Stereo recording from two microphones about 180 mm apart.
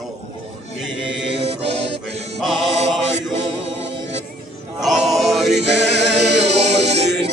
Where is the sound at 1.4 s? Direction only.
35° right (ahead or behind).